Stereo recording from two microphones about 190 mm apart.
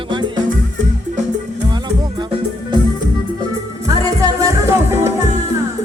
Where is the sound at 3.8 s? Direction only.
20° right (ahead or behind).